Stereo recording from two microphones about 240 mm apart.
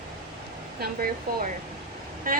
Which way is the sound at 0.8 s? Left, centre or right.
Right.